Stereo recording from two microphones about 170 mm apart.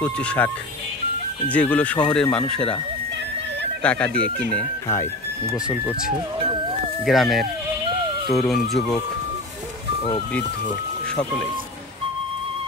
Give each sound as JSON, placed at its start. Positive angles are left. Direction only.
{"t": 0.0, "sound": "speech", "side_deg": 5}
{"t": 1.5, "sound": "speech", "side_deg": 10}
{"t": 3.8, "sound": "speech", "side_deg": 10}
{"t": 4.8, "sound": "speech", "side_deg": 20}
{"t": 6.3, "sound": "music", "side_deg": -30}
{"t": 7.1, "sound": "speech", "side_deg": 0}
{"t": 11.1, "sound": "speech", "side_deg": 5}